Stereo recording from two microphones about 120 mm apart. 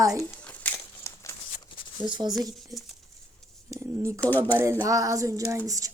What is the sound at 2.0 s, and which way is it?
Speech, 40° right (ahead or behind).